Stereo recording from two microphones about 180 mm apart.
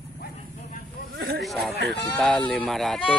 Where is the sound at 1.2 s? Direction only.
65° right (ahead or behind).